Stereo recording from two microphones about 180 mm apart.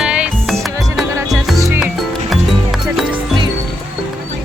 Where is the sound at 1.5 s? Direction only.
15° right (ahead or behind).